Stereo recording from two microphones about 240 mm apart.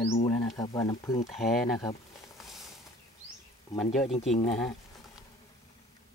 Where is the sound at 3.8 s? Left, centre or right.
Centre.